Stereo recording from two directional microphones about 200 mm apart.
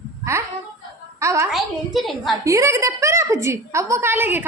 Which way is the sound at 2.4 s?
15° right (ahead or behind).